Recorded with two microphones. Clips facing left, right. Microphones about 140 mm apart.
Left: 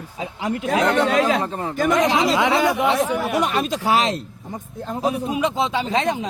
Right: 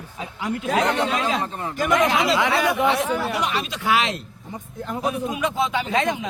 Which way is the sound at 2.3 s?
20° left (ahead or behind).